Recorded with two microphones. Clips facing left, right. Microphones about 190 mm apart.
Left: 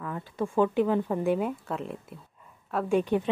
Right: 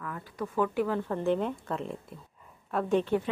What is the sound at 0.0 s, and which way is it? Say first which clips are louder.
A woman's voice: left 5 dB; 25° left (ahead or behind).